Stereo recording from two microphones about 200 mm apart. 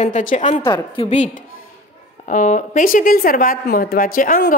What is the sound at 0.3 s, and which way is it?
A woman's voice, 35° left (ahead or behind).